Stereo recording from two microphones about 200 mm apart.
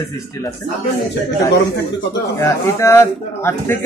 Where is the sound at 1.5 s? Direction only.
55° left (ahead or behind).